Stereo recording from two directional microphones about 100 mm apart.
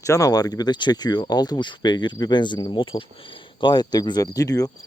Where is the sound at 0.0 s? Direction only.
35° left (ahead or behind).